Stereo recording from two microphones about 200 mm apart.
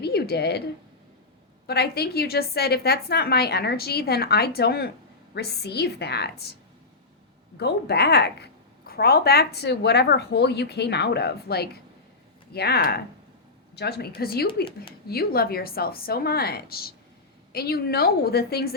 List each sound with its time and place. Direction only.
0.0 s a sound: 55° left (ahead or behind)
1.6 s a woman's voice: 55° left (ahead or behind)
7.6 s a woman's voice: 55° left (ahead or behind)